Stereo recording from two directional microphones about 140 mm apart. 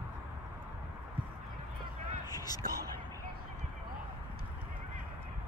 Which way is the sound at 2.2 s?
25° left (ahead or behind).